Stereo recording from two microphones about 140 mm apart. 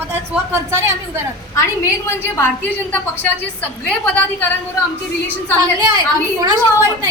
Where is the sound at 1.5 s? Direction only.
20° left (ahead or behind).